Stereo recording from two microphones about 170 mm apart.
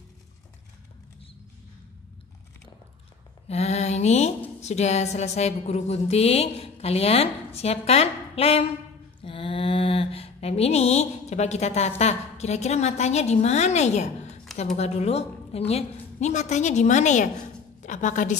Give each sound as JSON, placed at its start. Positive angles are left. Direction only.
{"t": 3.4, "sound": "mantra", "side_deg": 40}
{"t": 4.6, "sound": "a woman's voice", "side_deg": 40}
{"t": 9.2, "sound": "a sound", "side_deg": 30}
{"t": 12.0, "sound": "a woman's voice", "side_deg": 40}